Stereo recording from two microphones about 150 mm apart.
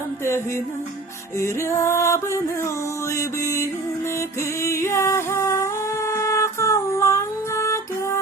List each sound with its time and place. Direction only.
1.4 s music: 20° left (ahead or behind)